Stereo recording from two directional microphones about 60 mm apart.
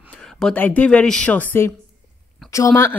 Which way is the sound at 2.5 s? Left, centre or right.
Left.